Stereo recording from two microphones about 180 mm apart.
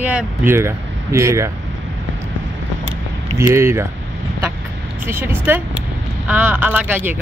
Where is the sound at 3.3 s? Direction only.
15° right (ahead or behind).